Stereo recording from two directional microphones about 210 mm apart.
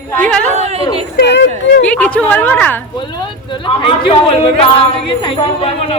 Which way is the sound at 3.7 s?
25° left (ahead or behind).